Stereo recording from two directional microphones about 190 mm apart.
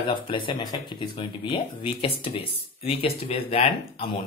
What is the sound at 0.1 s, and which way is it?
Speech, 25° left (ahead or behind).